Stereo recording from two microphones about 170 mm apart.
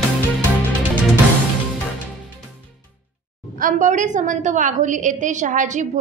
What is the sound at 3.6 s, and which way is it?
A woman's voice, 45° right (ahead or behind).